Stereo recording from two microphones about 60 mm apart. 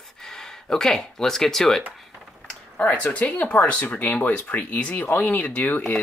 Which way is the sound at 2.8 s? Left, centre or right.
Left.